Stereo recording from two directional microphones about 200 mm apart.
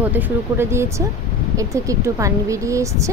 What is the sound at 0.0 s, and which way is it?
Speech, 10° right (ahead or behind).